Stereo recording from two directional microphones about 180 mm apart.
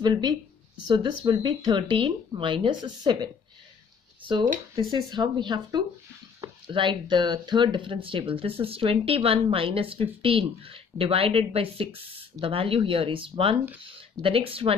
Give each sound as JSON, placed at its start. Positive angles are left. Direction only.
{"t": 0.0, "sound": "speech", "side_deg": -25}